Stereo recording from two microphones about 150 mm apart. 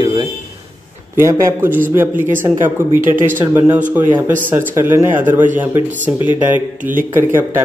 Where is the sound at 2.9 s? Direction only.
65° right (ahead or behind).